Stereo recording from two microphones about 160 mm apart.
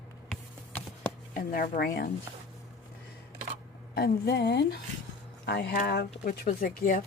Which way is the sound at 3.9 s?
85° left.